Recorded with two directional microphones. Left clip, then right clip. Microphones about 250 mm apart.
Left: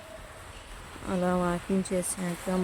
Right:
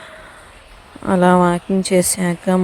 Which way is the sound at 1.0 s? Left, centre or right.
Right.